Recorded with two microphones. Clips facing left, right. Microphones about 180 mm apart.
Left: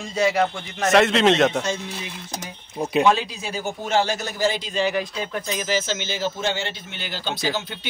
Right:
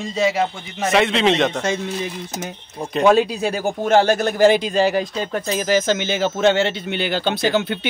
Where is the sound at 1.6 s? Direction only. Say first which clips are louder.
Right 4 dB; 60° right (ahead or behind).